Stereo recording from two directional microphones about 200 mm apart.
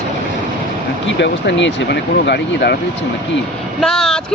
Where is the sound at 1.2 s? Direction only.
60° left (ahead or behind).